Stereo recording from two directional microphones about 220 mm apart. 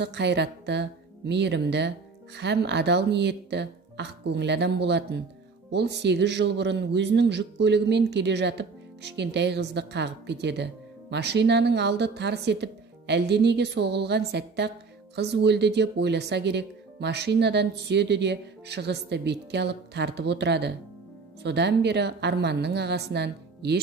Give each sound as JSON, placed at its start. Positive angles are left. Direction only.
{"t": 0.0, "sound": "a man's voice", "side_deg": -50}